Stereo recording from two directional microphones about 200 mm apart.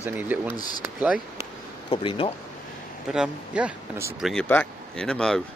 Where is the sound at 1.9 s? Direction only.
25° left (ahead or behind).